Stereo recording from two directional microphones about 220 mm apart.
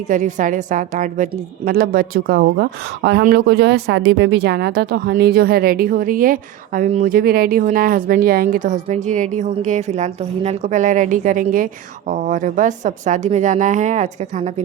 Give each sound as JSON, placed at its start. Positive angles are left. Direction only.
{"t": 0.1, "sound": "a woman's voice", "side_deg": -35}